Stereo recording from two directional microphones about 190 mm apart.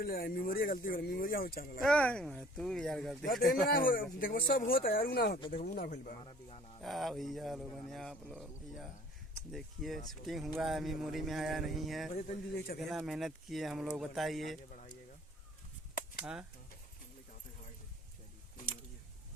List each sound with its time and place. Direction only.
0.0 s speech: 50° left (ahead or behind)
1.8 s speech: 5° left (ahead or behind)
3.7 s speech: 50° left (ahead or behind)
6.8 s speech: centre (ahead or behind)
12.1 s speech: 35° left (ahead or behind)
12.8 s speech: centre (ahead or behind)
16.2 s speech: 5° right (ahead or behind)